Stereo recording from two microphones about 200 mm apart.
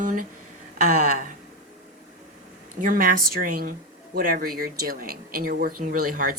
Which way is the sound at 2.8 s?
45° right (ahead or behind).